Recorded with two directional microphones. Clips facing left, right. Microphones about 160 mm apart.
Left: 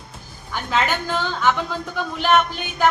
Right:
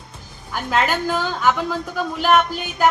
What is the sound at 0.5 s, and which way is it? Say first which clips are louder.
A woman's voice: right 2 dB; 5° right (ahead or behind).